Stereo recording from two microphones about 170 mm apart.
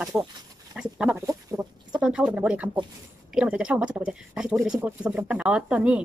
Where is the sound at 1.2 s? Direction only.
20° right (ahead or behind).